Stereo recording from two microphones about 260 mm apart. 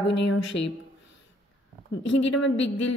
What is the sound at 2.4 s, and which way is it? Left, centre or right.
Speech, left.